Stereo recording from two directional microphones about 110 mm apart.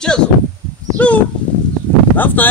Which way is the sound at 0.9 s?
15° left (ahead or behind).